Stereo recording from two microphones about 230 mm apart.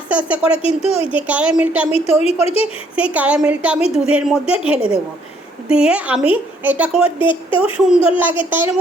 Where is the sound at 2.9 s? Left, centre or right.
Centre.